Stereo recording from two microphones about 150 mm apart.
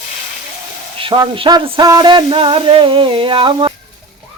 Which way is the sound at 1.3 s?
35° right (ahead or behind).